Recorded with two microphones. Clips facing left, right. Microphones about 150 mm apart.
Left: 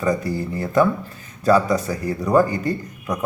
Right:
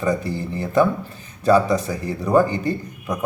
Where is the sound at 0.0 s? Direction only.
25° right (ahead or behind).